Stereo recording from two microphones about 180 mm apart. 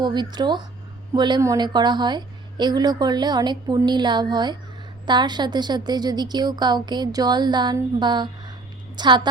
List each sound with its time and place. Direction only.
0.0 s a woman's voice: 25° right (ahead or behind)